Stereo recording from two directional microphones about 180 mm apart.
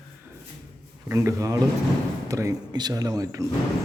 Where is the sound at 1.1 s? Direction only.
15° right (ahead or behind).